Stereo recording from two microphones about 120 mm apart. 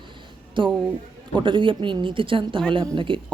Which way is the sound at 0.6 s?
40° right (ahead or behind).